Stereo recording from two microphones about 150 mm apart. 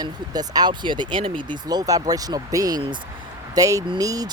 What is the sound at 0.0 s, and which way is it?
Speech, 25° right (ahead or behind).